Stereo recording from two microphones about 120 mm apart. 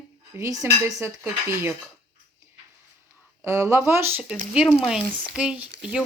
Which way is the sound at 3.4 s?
25° right (ahead or behind).